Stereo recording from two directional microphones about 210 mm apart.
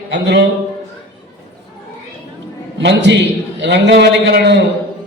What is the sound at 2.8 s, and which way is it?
A man's voice, 55° right (ahead or behind).